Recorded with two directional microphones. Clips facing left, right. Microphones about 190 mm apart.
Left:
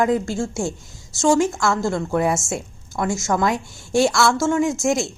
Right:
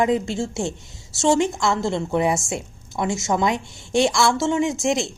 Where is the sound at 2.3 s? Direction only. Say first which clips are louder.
Left 1 dB; centre (ahead or behind).